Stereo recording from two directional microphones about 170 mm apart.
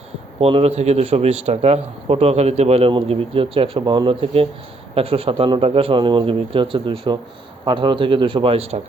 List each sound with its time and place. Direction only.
0.3 s speech: 35° right (ahead or behind)